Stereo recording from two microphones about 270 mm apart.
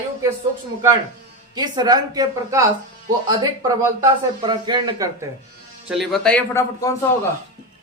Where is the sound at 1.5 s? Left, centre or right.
Centre.